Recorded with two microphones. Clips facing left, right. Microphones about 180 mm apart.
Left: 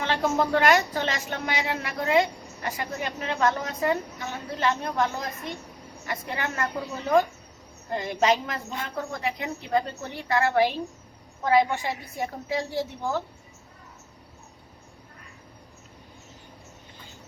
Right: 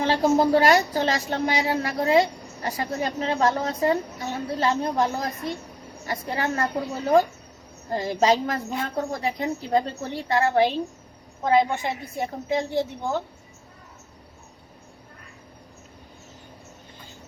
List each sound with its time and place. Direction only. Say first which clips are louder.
0.0 s a woman's voice: right 5 dB; 35° right (ahead or behind)